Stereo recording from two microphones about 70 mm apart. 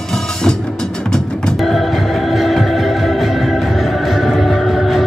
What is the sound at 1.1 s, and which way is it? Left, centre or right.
Music, centre.